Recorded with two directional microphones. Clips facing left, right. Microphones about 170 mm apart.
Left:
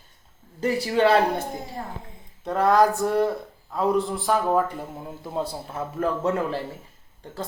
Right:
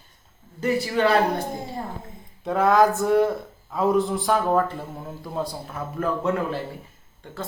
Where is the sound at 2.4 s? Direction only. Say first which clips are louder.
Right 1 dB; centre (ahead or behind).